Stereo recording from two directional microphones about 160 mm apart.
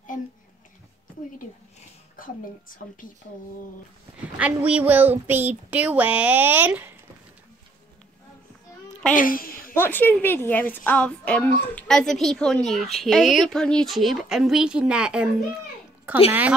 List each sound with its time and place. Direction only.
3.0 s speech: 55° left (ahead or behind)
4.4 s a child's voice: 10° right (ahead or behind)
9.1 s a woman's voice: 60° left (ahead or behind)
9.8 s a woman's voice: 10° left (ahead or behind); by 15.2 s 5° right (ahead or behind)
16.3 s a child's voice: 10° right (ahead or behind)